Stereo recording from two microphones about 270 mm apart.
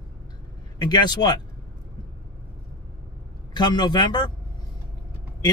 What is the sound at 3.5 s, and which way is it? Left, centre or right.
Speech, centre.